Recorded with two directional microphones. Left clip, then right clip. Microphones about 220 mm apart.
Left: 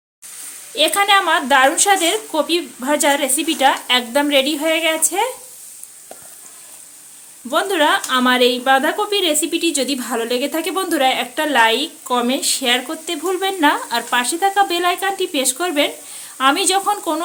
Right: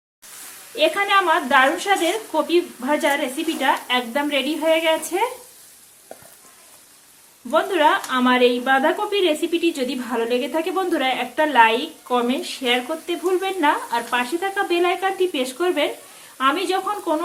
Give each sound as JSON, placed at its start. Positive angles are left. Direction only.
{"t": 0.8, "sound": "speech", "side_deg": 50}
{"t": 7.5, "sound": "speech", "side_deg": 45}